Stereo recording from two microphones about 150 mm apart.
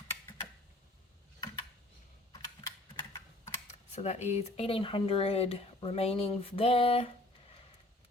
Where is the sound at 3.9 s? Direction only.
45° left (ahead or behind).